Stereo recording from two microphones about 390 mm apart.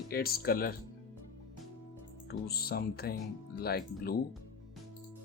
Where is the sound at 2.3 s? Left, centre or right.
Left.